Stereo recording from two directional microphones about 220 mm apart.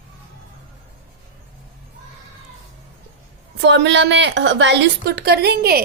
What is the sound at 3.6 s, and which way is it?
A woman's voice, 55° right (ahead or behind).